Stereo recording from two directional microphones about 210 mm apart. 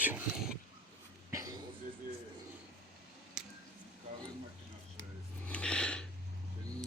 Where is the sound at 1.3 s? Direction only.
15° right (ahead or behind).